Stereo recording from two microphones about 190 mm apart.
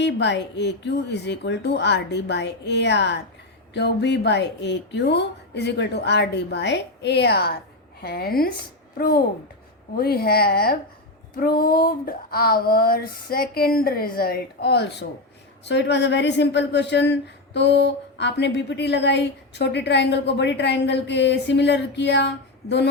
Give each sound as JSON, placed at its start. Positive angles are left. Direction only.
{"t": 0.0, "sound": "speech", "side_deg": 65}
{"t": 8.0, "sound": "a sound", "side_deg": 55}
{"t": 14.2, "sound": "speech", "side_deg": 50}